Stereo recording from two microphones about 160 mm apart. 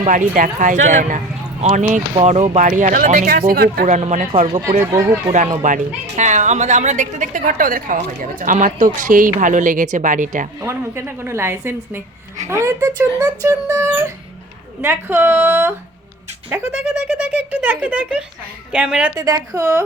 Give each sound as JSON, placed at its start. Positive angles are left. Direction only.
{"t": 0.0, "sound": "speech", "side_deg": -50}
{"t": 4.9, "sound": "speech", "side_deg": -20}
{"t": 5.3, "sound": "speech", "side_deg": -50}
{"t": 10.6, "sound": "speech", "side_deg": -15}
{"t": 16.8, "sound": "speech", "side_deg": -5}
{"t": 19.1, "sound": "speech", "side_deg": -20}